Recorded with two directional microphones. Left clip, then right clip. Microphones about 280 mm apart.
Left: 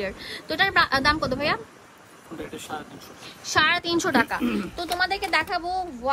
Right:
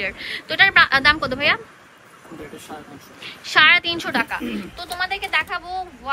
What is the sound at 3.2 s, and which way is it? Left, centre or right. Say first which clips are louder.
A woman's voice: right 7 dB; centre.